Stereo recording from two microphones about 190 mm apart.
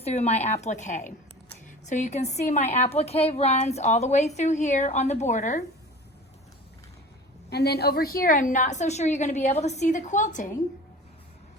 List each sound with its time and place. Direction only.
0.0 s a woman's voice: 35° left (ahead or behind)
7.5 s a woman's voice: 60° left (ahead or behind); by 10.5 s 40° left (ahead or behind)